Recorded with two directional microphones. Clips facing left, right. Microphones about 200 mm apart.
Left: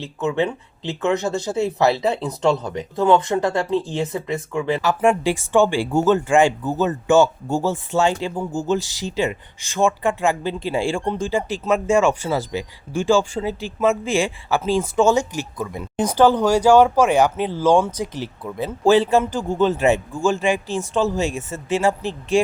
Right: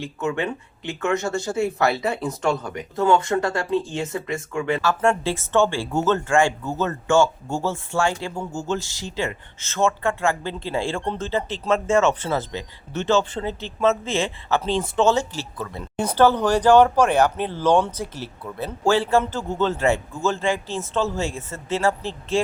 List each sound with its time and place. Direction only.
0.2 s speech: 20° left (ahead or behind)